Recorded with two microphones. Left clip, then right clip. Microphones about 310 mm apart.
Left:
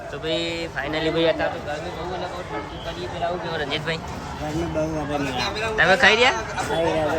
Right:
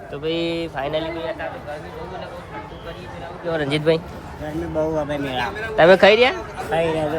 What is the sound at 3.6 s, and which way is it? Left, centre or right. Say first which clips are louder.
Speech: right 6 dB; centre.